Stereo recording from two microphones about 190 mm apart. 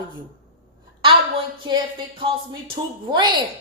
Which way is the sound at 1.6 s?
25° right (ahead or behind).